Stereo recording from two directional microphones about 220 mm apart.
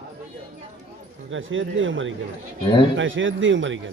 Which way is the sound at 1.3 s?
60° right (ahead or behind).